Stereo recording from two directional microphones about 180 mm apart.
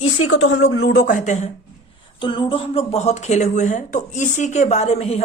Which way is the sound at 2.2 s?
25° left (ahead or behind).